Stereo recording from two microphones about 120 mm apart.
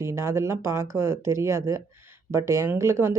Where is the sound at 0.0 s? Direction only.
20° right (ahead or behind).